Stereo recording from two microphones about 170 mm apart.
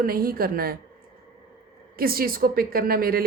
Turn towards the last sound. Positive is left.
turn(degrees=-60)  # may be behind; listen again after turning